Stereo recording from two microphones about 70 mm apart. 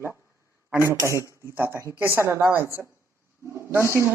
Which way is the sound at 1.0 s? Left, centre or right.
Right.